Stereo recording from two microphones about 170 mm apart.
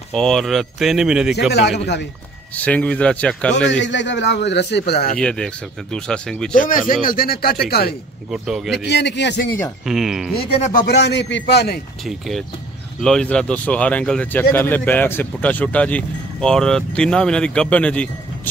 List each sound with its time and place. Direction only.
0.1 s speech: centre (ahead or behind)
1.5 s a man's voice: 85° left
2.5 s speech: 10° left (ahead or behind)
3.8 s a man's voice: 90° left; by 5.2 s 65° left (ahead or behind)
5.2 s speech: 5° left (ahead or behind)
6.5 s speech: 55° left (ahead or behind)
8.3 s speech: centre (ahead or behind)
8.7 s a man's voice: 90° left
9.8 s speech: centre (ahead or behind)
10.6 s speech: 55° left (ahead or behind)
11.0 s a man's voice: 90° left; by 11.8 s 75° left (ahead or behind)
12.0 s speech: centre (ahead or behind)